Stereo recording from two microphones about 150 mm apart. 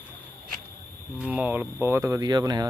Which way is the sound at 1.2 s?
10° right (ahead or behind).